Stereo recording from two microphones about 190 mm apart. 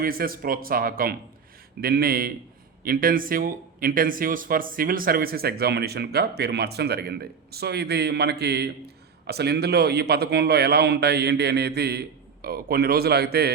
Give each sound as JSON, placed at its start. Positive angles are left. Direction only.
{"t": 0.0, "sound": "speech", "side_deg": -50}